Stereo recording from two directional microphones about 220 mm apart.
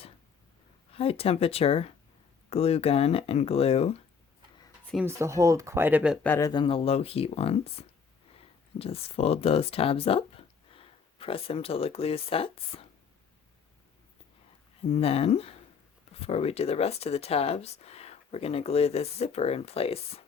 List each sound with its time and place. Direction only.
0.9 s speech: 25° left (ahead or behind)
5.0 s speech: 15° right (ahead or behind)
6.2 s speech: 10° left (ahead or behind)
6.5 s speech: 20° left (ahead or behind)
14.8 s speech: 30° left (ahead or behind)